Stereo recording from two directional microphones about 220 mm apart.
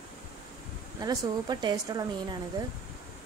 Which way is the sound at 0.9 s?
20° right (ahead or behind).